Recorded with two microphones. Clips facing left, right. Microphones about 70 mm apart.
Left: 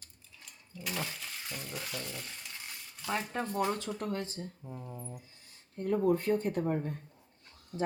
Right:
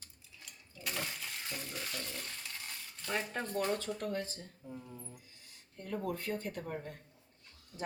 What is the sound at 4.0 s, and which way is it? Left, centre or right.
Speech, left.